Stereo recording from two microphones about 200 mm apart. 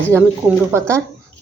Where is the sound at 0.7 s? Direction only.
15° right (ahead or behind).